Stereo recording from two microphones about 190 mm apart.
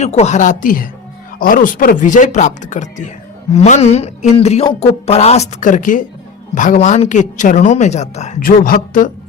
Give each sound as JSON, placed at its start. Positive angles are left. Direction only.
{"t": 0.0, "sound": "a woman's voice", "side_deg": 35}